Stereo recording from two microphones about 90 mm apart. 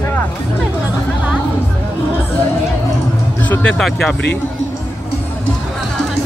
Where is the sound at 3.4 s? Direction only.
20° left (ahead or behind).